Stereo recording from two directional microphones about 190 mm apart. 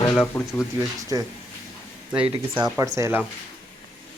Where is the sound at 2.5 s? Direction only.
20° right (ahead or behind).